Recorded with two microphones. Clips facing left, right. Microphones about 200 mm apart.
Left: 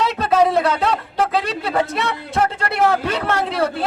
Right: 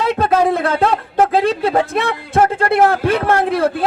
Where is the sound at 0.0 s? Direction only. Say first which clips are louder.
Right 2 dB; 50° right (ahead or behind).